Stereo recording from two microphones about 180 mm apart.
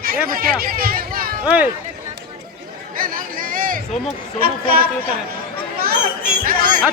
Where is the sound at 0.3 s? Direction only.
55° right (ahead or behind).